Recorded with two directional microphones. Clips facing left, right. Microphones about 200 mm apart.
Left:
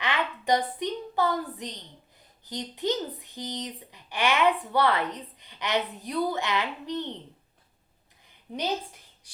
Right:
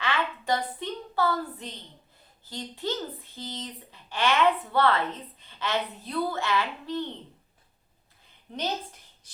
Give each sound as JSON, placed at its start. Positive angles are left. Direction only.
{"t": 0.0, "sound": "a woman's voice", "side_deg": 20}
{"t": 8.5, "sound": "speech", "side_deg": 10}